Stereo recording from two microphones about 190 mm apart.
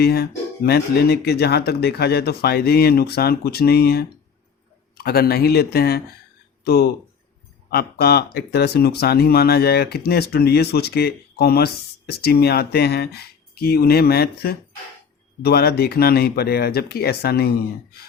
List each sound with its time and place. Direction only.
0.0 s speech: 55° left (ahead or behind)
7.7 s speech: 55° left (ahead or behind)